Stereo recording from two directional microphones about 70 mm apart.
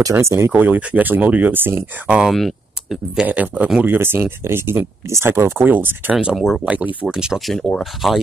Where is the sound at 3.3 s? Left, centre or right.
Right.